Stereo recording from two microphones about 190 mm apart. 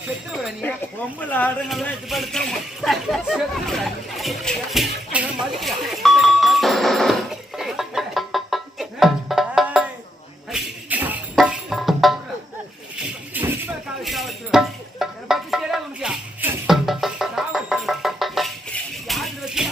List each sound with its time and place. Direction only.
1.2 s speech: 10° left (ahead or behind)
5.5 s music: centre (ahead or behind)
13.3 s a sound: 10° right (ahead or behind)
14.0 s music: centre (ahead or behind)